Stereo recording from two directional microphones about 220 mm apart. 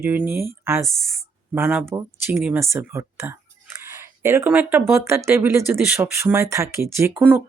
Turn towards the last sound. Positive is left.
turn(degrees=-5)  # may be behind; listen again after turning